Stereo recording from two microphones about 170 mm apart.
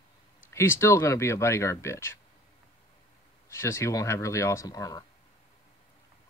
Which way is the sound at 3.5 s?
15° left (ahead or behind).